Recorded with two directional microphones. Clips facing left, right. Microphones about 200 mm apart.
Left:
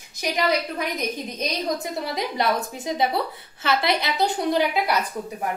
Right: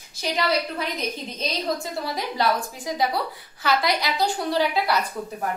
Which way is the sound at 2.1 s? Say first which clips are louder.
Even; 20° left (ahead or behind).